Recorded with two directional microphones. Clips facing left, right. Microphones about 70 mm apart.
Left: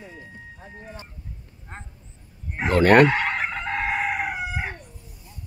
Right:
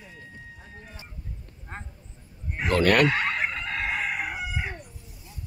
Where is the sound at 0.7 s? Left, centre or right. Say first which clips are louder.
Left 5 dB; centre.